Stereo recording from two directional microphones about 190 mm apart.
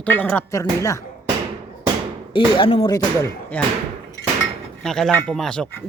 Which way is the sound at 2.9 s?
15° left (ahead or behind).